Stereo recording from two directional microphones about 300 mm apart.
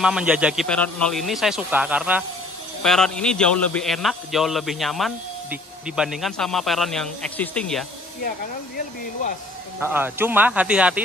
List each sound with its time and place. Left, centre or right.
0.0 s a man's voice: centre
9.8 s a man's voice: centre